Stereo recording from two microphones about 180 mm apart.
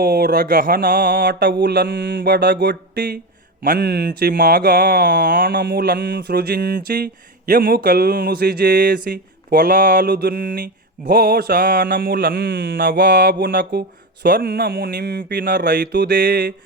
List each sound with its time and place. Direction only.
0.0 s speech: 60° right (ahead or behind)
1.6 s mantra: 70° right (ahead or behind)
3.6 s speech: 60° right (ahead or behind)
5.5 s speech: 65° right (ahead or behind)